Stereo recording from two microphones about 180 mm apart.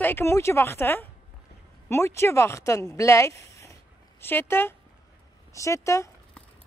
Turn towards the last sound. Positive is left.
turn(degrees=15)  # may be behind; listen again after turning